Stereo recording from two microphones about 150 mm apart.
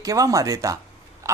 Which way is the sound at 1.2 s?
20° right (ahead or behind).